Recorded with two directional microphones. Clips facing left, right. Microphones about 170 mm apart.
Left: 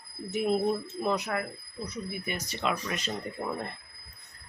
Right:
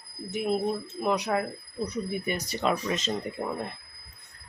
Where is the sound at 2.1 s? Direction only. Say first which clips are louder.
Right 5 dB; 40° right (ahead or behind).